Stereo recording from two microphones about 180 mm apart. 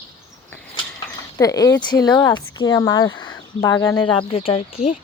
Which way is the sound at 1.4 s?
20° left (ahead or behind).